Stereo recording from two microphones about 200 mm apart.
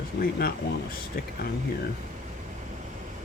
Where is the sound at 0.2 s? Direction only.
50° left (ahead or behind).